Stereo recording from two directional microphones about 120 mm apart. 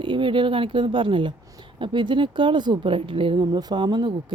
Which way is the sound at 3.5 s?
35° right (ahead or behind).